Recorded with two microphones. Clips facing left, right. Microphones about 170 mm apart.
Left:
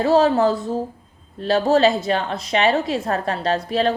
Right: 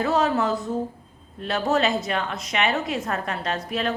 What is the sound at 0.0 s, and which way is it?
A woman's voice, 30° left (ahead or behind).